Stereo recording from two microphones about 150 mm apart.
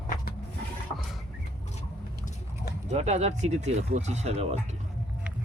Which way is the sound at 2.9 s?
45° right (ahead or behind).